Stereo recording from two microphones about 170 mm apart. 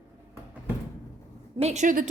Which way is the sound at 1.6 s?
40° right (ahead or behind).